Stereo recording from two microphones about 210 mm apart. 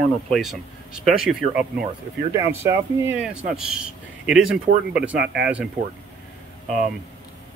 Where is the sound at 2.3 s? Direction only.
15° right (ahead or behind).